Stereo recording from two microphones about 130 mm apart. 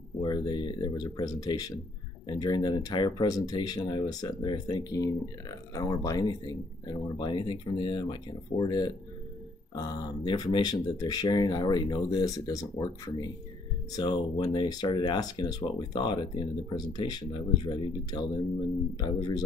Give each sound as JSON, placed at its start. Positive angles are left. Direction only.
{"t": 0.2, "sound": "speech", "side_deg": 35}